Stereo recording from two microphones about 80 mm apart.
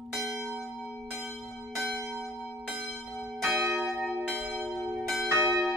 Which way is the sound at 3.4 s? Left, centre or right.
Centre.